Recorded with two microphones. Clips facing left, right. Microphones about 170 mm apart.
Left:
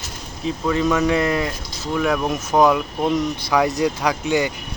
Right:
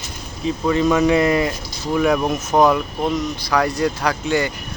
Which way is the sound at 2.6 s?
5° left (ahead or behind).